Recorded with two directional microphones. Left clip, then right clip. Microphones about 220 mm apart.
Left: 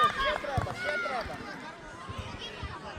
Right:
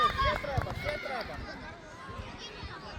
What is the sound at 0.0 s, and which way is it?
Run, 45° right (ahead or behind).